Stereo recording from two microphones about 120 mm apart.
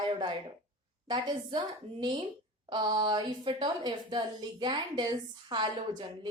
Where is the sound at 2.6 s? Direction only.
40° right (ahead or behind).